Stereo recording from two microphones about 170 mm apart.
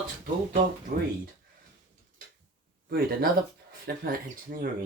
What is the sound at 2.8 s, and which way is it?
Speech, 65° right (ahead or behind).